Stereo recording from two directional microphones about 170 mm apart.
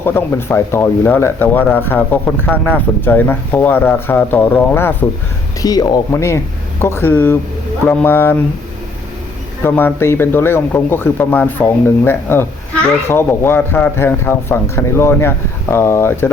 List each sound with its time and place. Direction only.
0.0 s speech: 15° left (ahead or behind)
9.6 s speech: 10° left (ahead or behind)